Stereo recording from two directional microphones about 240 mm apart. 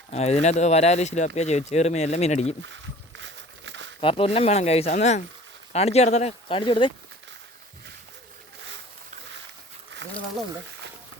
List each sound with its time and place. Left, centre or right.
0.1 s speech: left
3.2 s a sound: right
4.0 s speech: left